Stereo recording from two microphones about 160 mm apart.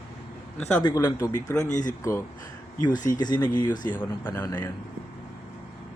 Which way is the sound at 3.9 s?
10° left (ahead or behind).